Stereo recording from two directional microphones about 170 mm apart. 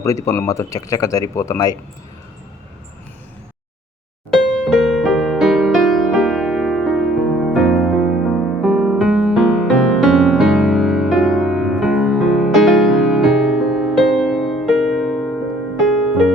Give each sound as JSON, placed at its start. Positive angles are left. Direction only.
{"t": 0.3, "sound": "speech", "side_deg": 20}
{"t": 4.3, "sound": "music", "side_deg": 5}